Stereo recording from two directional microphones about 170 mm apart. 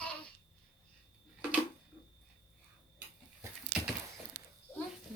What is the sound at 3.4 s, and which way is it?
Dog, 15° right (ahead or behind).